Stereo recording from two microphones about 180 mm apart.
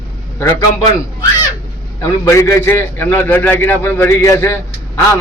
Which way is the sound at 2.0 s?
15° left (ahead or behind).